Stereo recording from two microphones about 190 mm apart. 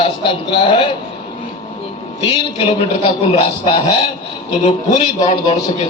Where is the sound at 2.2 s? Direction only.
30° left (ahead or behind).